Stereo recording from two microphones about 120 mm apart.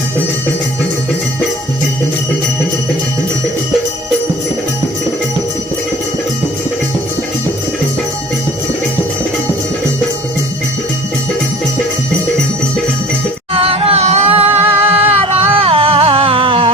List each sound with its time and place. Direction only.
13.5 s music: 50° right (ahead or behind)
14.7 s music: 15° right (ahead or behind)
15.0 s a sound: 20° right (ahead or behind)
15.5 s music: 50° right (ahead or behind)